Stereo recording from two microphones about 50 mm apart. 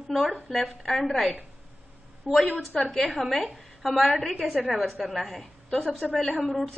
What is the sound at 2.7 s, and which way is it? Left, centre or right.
A woman's voice, centre.